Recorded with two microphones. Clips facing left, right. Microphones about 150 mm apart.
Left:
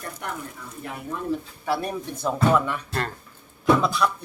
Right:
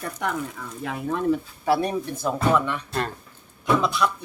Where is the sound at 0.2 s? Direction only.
90° right.